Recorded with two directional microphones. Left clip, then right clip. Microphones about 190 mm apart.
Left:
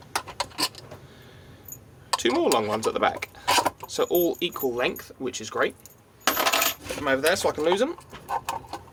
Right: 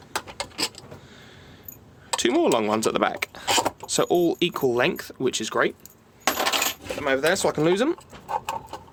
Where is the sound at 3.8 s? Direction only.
55° right (ahead or behind).